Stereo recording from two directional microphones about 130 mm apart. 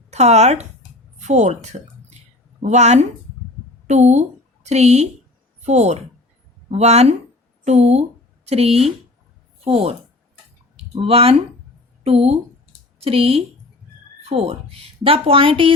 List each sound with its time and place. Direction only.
0.1 s a woman's voice: 55° right (ahead or behind)